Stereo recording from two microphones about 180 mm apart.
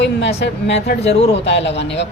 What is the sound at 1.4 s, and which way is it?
Speech, 85° left.